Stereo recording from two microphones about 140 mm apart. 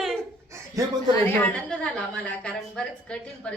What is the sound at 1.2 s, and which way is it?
Speech, 5° left (ahead or behind).